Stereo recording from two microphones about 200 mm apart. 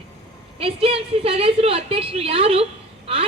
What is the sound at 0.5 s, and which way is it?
A woman's voice, 30° right (ahead or behind).